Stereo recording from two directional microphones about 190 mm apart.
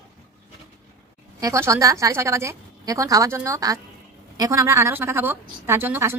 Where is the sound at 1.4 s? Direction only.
15° right (ahead or behind).